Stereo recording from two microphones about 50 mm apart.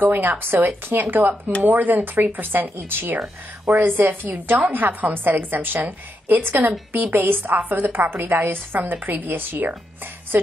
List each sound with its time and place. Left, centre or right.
0.0 s a woman's voice: right